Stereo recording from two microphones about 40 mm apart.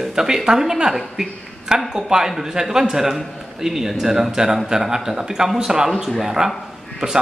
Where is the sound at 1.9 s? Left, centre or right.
Centre.